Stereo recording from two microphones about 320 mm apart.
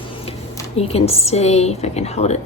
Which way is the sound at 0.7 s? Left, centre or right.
Centre.